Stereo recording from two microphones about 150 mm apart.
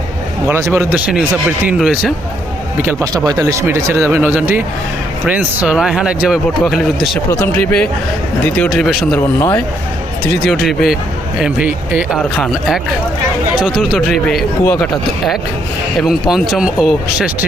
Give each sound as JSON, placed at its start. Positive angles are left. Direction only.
{"t": 0.4, "sound": "speech", "side_deg": -15}
{"t": 3.0, "sound": "speech", "side_deg": -25}
{"t": 7.3, "sound": "speech", "side_deg": 15}
{"t": 8.7, "sound": "speech", "side_deg": -5}
{"t": 9.1, "sound": "speech", "side_deg": 15}
{"t": 10.4, "sound": "speech", "side_deg": 0}
{"t": 12.2, "sound": "speech", "side_deg": 0}
{"t": 14.6, "sound": "speech", "side_deg": 10}
{"t": 16.0, "sound": "speech", "side_deg": 0}